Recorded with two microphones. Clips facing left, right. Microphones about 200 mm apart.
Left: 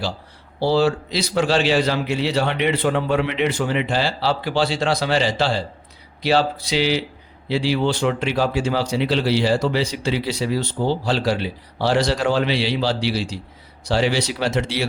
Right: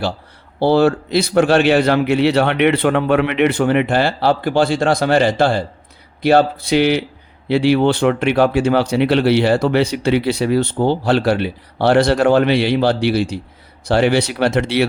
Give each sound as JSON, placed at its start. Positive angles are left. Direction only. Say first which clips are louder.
{"t": 0.6, "sound": "speech", "louder": "right 5 dB", "side_deg": -55}